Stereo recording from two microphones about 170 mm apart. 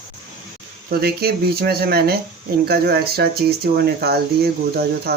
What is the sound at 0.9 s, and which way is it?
Speech, 65° right (ahead or behind).